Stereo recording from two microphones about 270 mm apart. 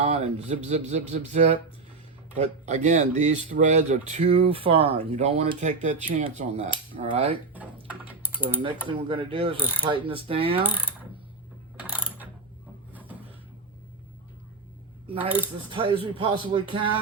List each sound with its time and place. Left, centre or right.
0.0 s speech: right
8.0 s typing: centre
8.9 s speech: centre
11.8 s mechanisms: centre
12.9 s a sound: centre
15.7 s speech: centre